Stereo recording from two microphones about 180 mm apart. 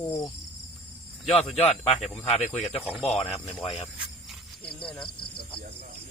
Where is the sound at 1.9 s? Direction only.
Centre (ahead or behind).